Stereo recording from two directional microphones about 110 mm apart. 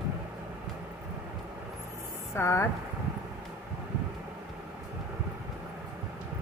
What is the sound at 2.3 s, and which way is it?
Speech, 20° left (ahead or behind).